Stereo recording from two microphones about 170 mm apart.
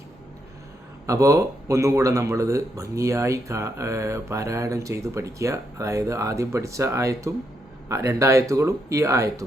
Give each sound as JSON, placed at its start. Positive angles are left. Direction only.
{"t": 1.0, "sound": "speech", "side_deg": -20}